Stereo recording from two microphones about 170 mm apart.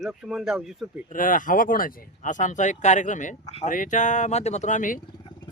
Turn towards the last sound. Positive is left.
turn(degrees=50)  # may be behind; listen again after turning